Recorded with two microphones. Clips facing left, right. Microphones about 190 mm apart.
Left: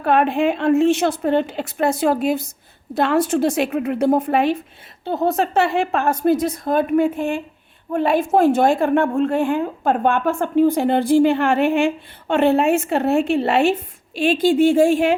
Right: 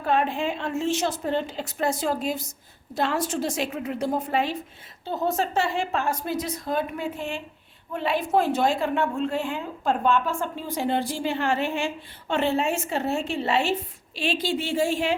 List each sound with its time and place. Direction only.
0.0 s a woman's voice: 65° left (ahead or behind)